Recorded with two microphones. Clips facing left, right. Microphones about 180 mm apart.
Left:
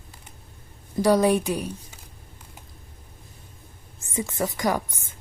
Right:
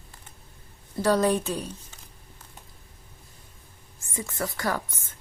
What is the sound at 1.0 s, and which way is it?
Speech, 15° left (ahead or behind).